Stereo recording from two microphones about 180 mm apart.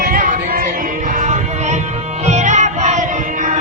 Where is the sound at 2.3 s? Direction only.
40° right (ahead or behind).